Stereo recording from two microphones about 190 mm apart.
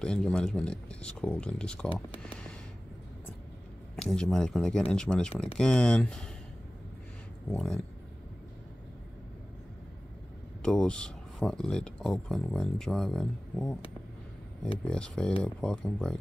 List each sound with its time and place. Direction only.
0.0 s speech: 5° left (ahead or behind)
3.9 s speech: 5° left (ahead or behind)
7.5 s speech: 5° left (ahead or behind)
10.6 s speech: 5° left (ahead or behind)
14.9 s speech: 5° left (ahead or behind)